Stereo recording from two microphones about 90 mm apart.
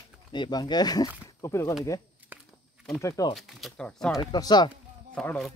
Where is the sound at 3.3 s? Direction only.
Centre (ahead or behind).